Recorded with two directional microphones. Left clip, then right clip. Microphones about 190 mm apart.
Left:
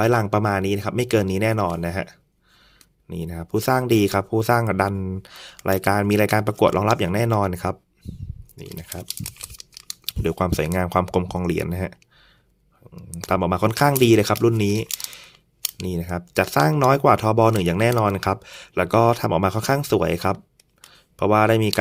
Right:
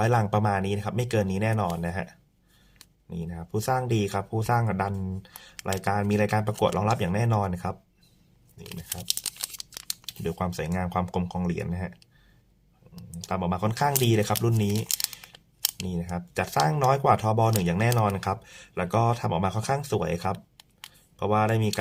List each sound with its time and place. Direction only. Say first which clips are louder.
0.0 s speech: left 5 dB; 35° left (ahead or behind)
10.1 s speech: left 9 dB; 40° left (ahead or behind)
13.2 s speech: left 8 dB; 40° left (ahead or behind)
15.9 s speech: left 6 dB; 40° left (ahead or behind)